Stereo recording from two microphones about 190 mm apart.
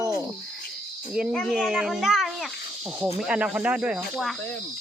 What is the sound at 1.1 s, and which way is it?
A child's voice, centre (ahead or behind).